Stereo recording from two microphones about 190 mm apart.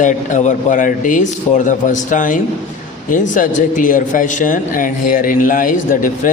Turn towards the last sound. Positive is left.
turn(degrees=45)  # may be behind; listen again after turning